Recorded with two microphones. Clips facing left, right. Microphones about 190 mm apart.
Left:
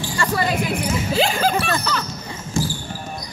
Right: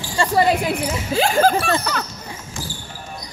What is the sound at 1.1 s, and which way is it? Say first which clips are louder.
Speech: right 5 dB; 50° right (ahead or behind).